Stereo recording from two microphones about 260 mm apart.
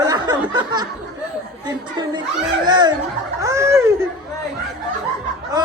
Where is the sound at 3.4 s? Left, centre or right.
Centre.